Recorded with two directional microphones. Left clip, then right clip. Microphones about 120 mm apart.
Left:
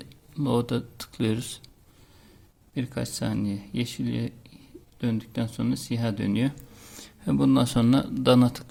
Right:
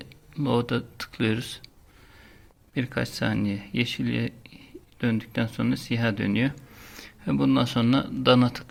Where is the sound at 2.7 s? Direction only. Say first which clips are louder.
Right 3 dB; 15° left (ahead or behind); by 8.6 s 40° left (ahead or behind).